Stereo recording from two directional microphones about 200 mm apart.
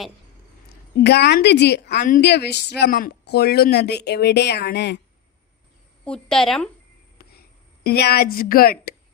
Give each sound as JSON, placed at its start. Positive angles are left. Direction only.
{"t": 0.9, "sound": "speech", "side_deg": 55}
{"t": 6.1, "sound": "a woman's voice", "side_deg": 5}
{"t": 7.9, "sound": "a woman's voice", "side_deg": 50}